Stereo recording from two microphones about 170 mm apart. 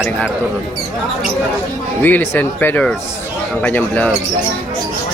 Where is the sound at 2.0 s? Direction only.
15° left (ahead or behind).